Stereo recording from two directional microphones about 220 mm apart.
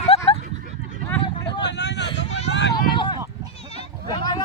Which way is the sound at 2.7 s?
20° left (ahead or behind).